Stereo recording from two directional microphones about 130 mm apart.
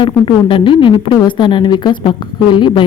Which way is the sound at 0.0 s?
40° left (ahead or behind).